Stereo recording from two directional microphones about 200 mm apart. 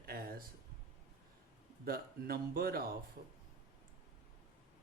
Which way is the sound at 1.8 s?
50° right (ahead or behind).